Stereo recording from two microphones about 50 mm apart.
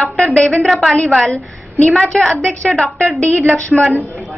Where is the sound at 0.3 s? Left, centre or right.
Centre.